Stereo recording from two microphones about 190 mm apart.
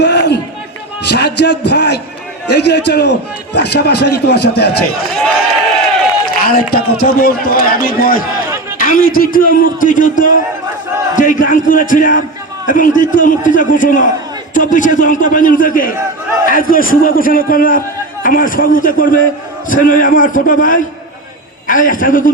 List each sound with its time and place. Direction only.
0.0 s run: 65° left (ahead or behind)
1.0 s a man's voice: 60° left (ahead or behind)
6.4 s a man's voice: 50° left (ahead or behind)